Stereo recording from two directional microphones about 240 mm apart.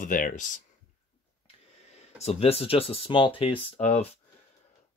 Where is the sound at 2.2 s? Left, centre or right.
Left.